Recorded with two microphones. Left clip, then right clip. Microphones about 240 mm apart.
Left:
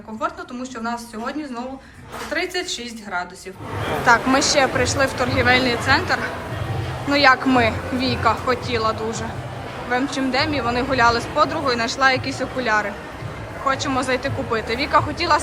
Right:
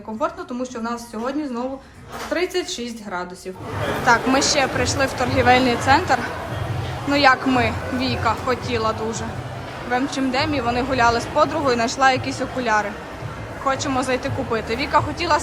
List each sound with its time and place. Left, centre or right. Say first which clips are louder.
0.2 s a woman's voice: right 2 dB; centre
4.0 s speech: left 1 dB; centre